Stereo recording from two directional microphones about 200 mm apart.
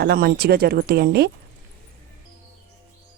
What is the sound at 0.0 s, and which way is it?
Speech, 50° right (ahead or behind).